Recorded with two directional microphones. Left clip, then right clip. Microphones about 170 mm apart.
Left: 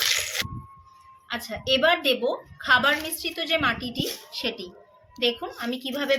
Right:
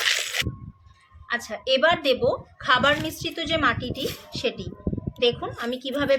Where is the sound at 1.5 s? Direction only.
10° right (ahead or behind).